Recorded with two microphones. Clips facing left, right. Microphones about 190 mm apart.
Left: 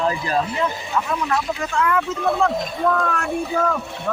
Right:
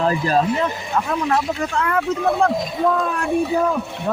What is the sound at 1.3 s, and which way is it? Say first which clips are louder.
Speech: right 1 dB; 35° right (ahead or behind).